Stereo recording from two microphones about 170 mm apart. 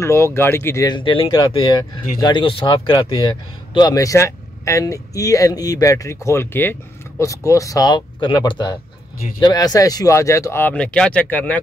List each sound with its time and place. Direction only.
0.0 s a man's voice: 15° left (ahead or behind)